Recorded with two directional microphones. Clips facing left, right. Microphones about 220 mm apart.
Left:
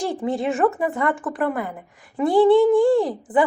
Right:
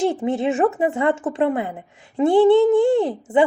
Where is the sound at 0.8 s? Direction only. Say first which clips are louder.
Right 3 dB; 25° right (ahead or behind).